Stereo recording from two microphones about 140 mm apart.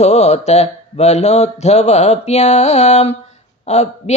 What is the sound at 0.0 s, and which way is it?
Speech, 50° left (ahead or behind).